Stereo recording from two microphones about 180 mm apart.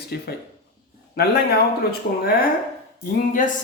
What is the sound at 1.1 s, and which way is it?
Speech, 60° left (ahead or behind).